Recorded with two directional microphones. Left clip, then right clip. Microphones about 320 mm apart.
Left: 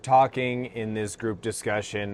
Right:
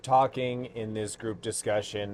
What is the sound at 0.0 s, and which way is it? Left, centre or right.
Speech, left.